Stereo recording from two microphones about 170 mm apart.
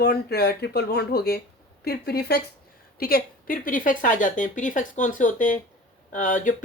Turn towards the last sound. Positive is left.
turn(degrees=50)  # may be behind; listen again after turning